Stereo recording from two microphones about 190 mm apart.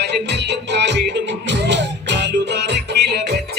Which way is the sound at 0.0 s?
65° right (ahead or behind).